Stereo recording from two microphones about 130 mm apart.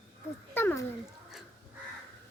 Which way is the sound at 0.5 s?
20° left (ahead or behind).